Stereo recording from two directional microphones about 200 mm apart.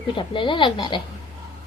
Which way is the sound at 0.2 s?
25° left (ahead or behind).